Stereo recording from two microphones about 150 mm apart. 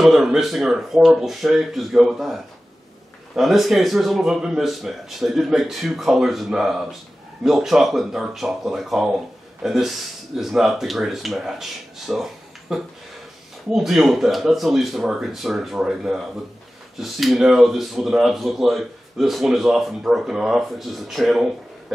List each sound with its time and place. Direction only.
0.0 s speech: centre (ahead or behind)
3.3 s speech: centre (ahead or behind)
12.1 s a sound: centre (ahead or behind)
13.7 s speech: centre (ahead or behind)